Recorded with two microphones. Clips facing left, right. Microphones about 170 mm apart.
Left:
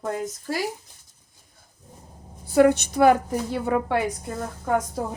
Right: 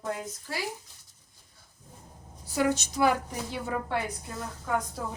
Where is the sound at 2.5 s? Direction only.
60° left (ahead or behind).